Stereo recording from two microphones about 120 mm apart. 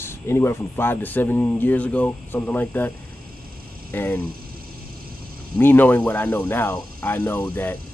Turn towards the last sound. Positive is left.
turn(degrees=15)  # may be behind; listen again after turning